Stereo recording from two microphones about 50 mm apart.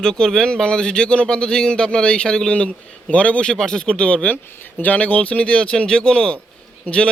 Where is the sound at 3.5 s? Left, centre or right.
Centre.